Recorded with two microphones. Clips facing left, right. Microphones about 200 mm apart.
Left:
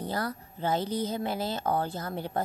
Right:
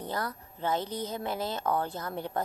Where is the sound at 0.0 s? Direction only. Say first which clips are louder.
Left 2 dB; 35° left (ahead or behind).